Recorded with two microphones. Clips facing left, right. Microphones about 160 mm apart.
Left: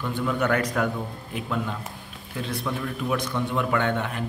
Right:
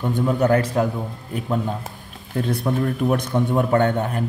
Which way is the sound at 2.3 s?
50° right (ahead or behind).